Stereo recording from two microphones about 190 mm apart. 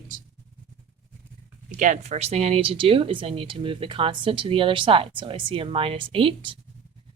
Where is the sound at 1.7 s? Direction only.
40° right (ahead or behind).